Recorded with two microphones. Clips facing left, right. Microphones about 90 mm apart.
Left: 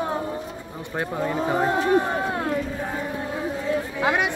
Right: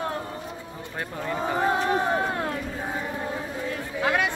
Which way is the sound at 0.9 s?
10° left (ahead or behind).